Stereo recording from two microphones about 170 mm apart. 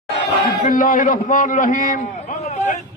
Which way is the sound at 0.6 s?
50° left (ahead or behind).